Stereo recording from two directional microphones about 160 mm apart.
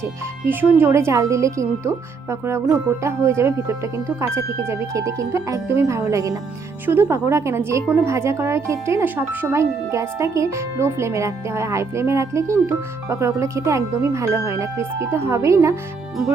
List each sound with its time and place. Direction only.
0.4 s speech: 15° right (ahead or behind)